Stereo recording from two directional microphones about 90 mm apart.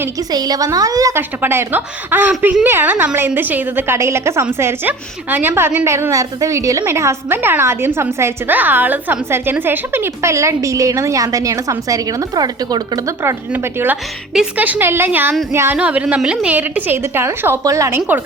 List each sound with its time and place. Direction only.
0.3 s a woman's voice: 45° right (ahead or behind)
1.1 s a woman's voice: 25° right (ahead or behind); by 13.0 s 50° right (ahead or behind)
13.5 s a woman's voice: 20° right (ahead or behind)
15.8 s a woman's voice: 15° right (ahead or behind); by 18.0 s 35° right (ahead or behind)